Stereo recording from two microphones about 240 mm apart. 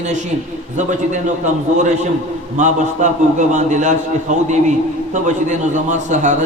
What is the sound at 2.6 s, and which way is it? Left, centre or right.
A man's voice, right.